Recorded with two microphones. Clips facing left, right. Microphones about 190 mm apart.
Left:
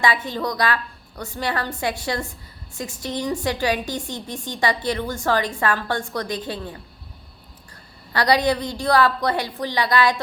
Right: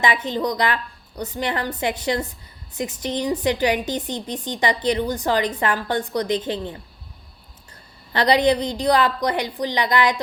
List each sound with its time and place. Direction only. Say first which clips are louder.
0.0 s a woman's voice: right 1 dB; 20° right (ahead or behind)
8.1 s a woman's voice: right 2 dB; 20° right (ahead or behind)